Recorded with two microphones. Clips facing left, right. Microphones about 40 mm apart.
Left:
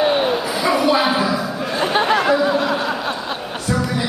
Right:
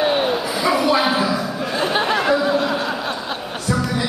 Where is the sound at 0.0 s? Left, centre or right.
Centre.